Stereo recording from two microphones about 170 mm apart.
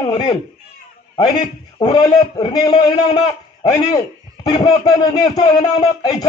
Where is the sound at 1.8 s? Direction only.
25° left (ahead or behind).